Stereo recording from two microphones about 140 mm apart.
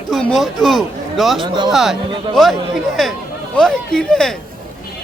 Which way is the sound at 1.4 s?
30° right (ahead or behind).